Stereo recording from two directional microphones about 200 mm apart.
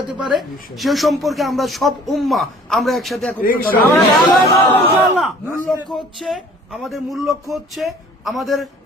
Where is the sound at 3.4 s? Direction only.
45° left (ahead or behind).